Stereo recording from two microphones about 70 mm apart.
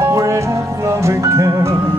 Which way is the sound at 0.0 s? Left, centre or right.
Right.